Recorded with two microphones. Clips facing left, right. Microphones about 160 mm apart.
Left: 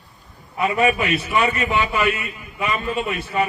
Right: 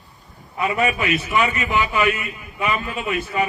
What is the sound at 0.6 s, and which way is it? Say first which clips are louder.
A man's voice: left 2 dB; 35° left (ahead or behind).